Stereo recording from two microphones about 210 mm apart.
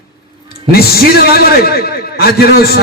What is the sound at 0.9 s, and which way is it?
A man's voice, 45° left (ahead or behind).